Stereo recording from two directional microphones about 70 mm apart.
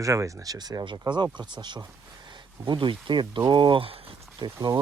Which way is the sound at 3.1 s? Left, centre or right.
Right.